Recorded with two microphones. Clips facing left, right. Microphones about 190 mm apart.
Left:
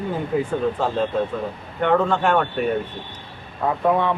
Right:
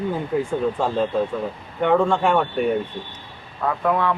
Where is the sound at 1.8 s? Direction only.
10° right (ahead or behind).